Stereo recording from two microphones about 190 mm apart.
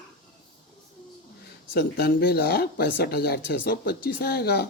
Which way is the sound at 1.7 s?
55° left (ahead or behind).